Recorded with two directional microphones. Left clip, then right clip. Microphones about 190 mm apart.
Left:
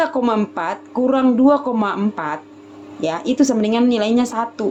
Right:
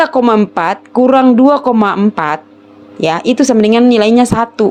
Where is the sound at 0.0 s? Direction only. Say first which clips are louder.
Right 8 dB; 50° right (ahead or behind).